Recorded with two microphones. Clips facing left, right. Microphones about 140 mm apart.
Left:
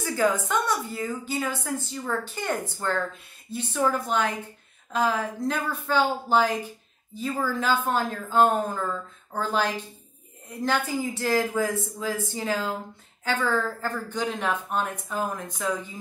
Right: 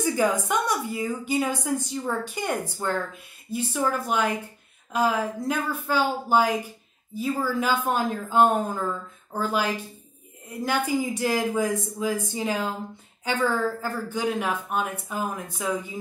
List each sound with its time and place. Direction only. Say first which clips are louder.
0.0 s a woman's voice: right 1 dB; 15° right (ahead or behind)